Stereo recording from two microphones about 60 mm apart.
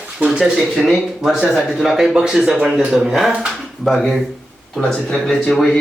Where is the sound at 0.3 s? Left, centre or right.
Centre.